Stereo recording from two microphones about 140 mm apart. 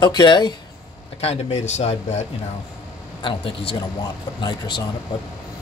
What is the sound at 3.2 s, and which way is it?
Speech, 35° left (ahead or behind).